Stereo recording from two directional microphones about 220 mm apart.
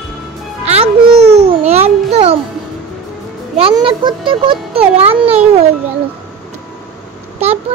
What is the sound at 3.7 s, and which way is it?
Speech, 20° right (ahead or behind).